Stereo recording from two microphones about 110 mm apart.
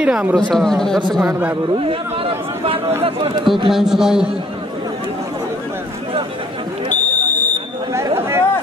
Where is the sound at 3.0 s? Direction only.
60° right (ahead or behind).